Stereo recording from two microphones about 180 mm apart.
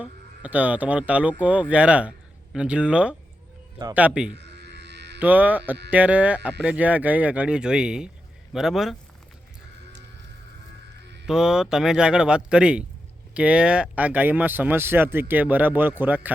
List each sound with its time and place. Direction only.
0.0 s speech: 10° right (ahead or behind)
4.4 s a sound: 70° right (ahead or behind)
5.2 s speech: 10° right (ahead or behind)
11.3 s speech: 5° right (ahead or behind)